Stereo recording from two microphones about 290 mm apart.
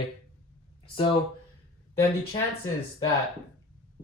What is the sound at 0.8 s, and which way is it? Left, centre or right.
Speech, centre.